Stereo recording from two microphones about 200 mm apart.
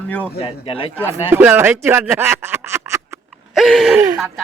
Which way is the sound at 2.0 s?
10° right (ahead or behind).